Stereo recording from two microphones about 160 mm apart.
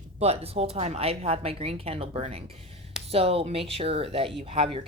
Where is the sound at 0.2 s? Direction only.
40° right (ahead or behind).